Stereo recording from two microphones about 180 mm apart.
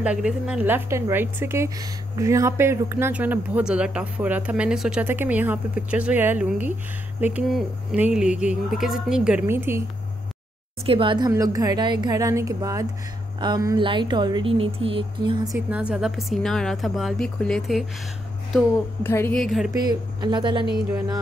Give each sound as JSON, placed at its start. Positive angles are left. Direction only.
{"t": 0.0, "sound": "a woman's voice", "side_deg": -5}
{"t": 10.9, "sound": "speech", "side_deg": -30}
{"t": 15.7, "sound": "speech", "side_deg": -5}
{"t": 19.0, "sound": "a woman's voice", "side_deg": 15}
{"t": 19.3, "sound": "speech", "side_deg": 0}
{"t": 19.7, "sound": "speech", "side_deg": -25}